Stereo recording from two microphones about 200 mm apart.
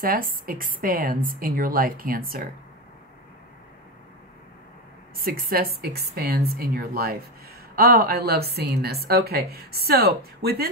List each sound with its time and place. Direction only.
0.0 s a woman's voice: 45° right (ahead or behind)
5.2 s a woman's voice: 45° right (ahead or behind)